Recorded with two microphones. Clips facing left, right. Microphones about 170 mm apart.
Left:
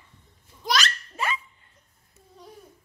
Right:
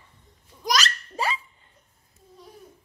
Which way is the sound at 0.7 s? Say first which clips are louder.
Right 1 dB; 35° right (ahead or behind).